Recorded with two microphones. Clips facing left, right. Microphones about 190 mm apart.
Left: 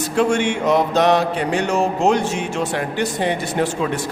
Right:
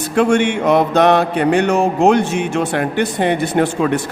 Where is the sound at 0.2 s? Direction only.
60° right (ahead or behind).